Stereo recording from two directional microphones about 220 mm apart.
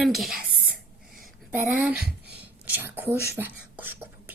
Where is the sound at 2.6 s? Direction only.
10° right (ahead or behind).